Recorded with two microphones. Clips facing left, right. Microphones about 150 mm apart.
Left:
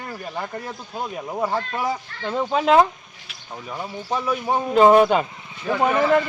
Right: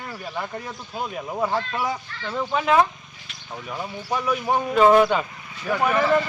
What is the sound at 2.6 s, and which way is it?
Speech, 25° left (ahead or behind).